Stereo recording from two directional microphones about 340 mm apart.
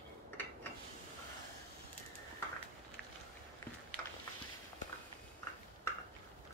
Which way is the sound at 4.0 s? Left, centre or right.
Centre.